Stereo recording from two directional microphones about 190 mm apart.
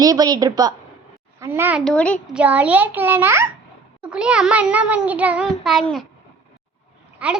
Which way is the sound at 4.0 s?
5° right (ahead or behind).